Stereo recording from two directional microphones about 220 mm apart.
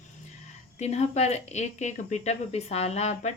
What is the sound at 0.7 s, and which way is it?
Speech, 30° left (ahead or behind).